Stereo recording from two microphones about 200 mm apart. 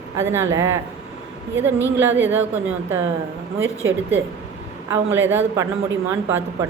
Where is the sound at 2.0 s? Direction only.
10° right (ahead or behind).